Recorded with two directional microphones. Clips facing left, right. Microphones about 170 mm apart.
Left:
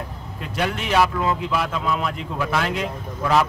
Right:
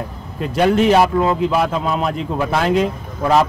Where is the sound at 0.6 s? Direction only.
35° right (ahead or behind).